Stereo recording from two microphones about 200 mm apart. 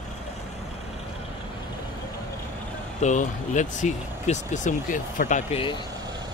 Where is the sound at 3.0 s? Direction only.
35° left (ahead or behind).